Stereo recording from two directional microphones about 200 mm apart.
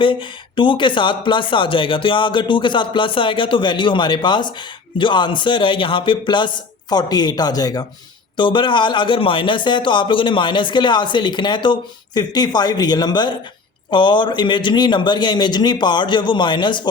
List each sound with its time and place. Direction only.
0.0 s a man's voice: 25° left (ahead or behind)